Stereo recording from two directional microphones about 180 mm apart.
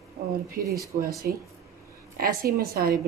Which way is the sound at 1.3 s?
55° right (ahead or behind).